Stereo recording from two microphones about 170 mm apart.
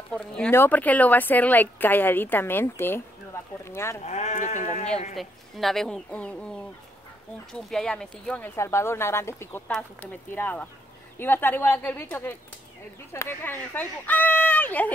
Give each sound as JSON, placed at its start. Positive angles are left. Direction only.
{"t": 0.1, "sound": "speech", "side_deg": 10}
{"t": 4.0, "sound": "speech", "side_deg": 40}
{"t": 5.1, "sound": "speech", "side_deg": 0}
{"t": 7.5, "sound": "speech", "side_deg": 5}
{"t": 8.5, "sound": "speech", "side_deg": 15}